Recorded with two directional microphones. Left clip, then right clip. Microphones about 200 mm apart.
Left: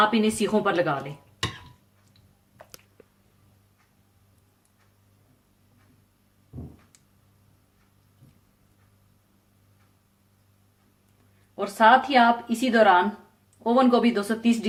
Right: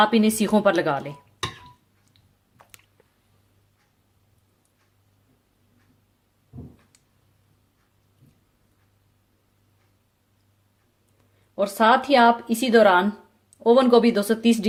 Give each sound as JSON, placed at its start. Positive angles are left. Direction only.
{"t": 0.0, "sound": "a woman's voice", "side_deg": -45}
{"t": 11.5, "sound": "a woman's voice", "side_deg": -45}